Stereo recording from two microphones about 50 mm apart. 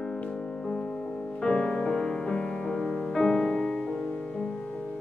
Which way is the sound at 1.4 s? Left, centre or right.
Centre.